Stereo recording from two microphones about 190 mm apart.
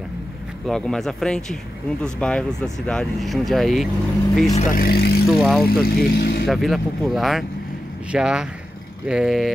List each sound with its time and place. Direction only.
0.7 s speech: 5° left (ahead or behind)
4.5 s speech: 35° left (ahead or behind)
4.7 s speech: 55° left (ahead or behind)
5.3 s speech: centre (ahead or behind)
5.7 s speech: 50° left (ahead or behind)
6.4 s speech: centre (ahead or behind)